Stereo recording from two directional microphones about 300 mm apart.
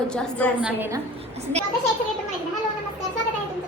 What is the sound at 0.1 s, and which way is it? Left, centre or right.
Speech, centre.